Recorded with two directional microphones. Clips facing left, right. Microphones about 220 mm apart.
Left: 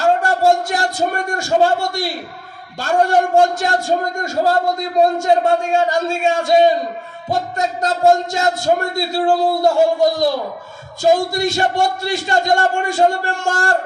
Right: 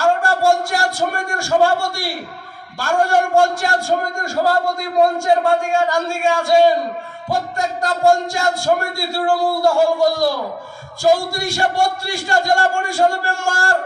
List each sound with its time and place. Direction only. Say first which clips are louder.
0.0 s a man's voice: left 1 dB; 20° left (ahead or behind)